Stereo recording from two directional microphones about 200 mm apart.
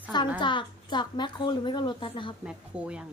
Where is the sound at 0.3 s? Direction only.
25° left (ahead or behind).